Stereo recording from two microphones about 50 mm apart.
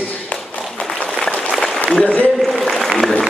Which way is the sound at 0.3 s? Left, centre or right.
Left.